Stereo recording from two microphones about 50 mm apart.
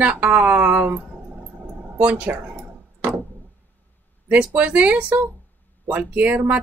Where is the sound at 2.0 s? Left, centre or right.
Right.